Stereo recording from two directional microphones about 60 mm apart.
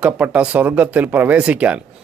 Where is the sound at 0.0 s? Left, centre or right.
Right.